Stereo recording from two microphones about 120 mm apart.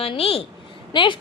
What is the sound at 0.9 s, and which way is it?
Speech, 40° left (ahead or behind).